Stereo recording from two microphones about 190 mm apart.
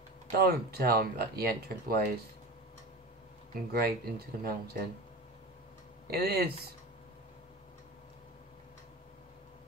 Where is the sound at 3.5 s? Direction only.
55° right (ahead or behind).